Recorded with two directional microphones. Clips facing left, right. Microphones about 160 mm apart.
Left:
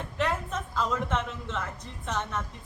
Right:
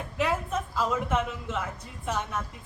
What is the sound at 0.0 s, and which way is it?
A woman's voice, 10° right (ahead or behind).